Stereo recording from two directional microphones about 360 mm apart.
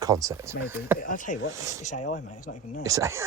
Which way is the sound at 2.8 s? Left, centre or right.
Centre.